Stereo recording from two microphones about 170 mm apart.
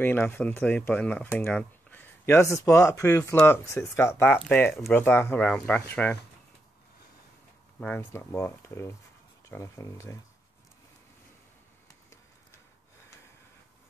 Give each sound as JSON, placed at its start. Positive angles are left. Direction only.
{"t": 0.0, "sound": "speech", "side_deg": 10}
{"t": 7.8, "sound": "speech", "side_deg": 10}